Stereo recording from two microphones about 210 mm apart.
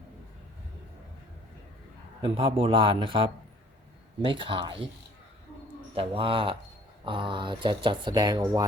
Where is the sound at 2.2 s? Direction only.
25° right (ahead or behind).